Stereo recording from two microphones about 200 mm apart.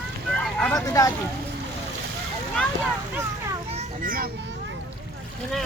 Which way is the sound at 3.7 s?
45° right (ahead or behind).